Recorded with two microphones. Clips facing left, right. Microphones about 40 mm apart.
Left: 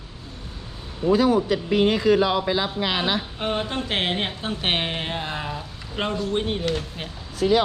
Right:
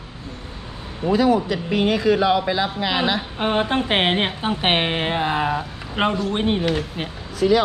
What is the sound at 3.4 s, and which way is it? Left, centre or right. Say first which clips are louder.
Speech: right 6 dB; right.